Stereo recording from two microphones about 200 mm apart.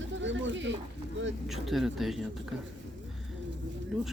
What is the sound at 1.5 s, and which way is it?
Speech, centre (ahead or behind).